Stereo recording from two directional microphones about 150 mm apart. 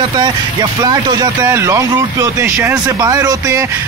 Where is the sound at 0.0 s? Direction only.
30° right (ahead or behind).